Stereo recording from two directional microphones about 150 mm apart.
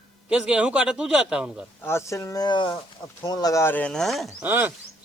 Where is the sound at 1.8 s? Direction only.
15° left (ahead or behind); by 4.3 s centre (ahead or behind).